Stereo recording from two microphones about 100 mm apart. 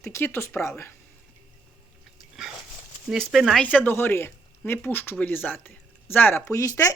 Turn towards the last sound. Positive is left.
turn(degrees=35)  # may be behind; listen again after turning